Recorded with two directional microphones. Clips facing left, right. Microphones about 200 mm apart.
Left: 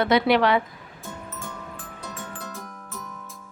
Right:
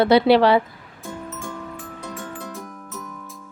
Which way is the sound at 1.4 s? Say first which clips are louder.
Right 5 dB; 5° right (ahead or behind).